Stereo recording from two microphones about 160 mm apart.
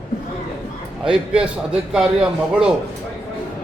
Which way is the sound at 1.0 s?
5° right (ahead or behind).